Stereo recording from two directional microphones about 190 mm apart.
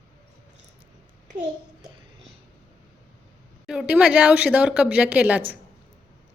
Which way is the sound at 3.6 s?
5° right (ahead or behind).